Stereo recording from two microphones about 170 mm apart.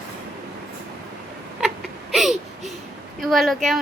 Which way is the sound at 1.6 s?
Centre (ahead or behind).